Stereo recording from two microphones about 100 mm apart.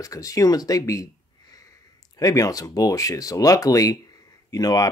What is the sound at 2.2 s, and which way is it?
Speech, 35° left (ahead or behind).